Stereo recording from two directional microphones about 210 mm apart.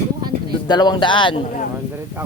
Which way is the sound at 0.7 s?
20° left (ahead or behind).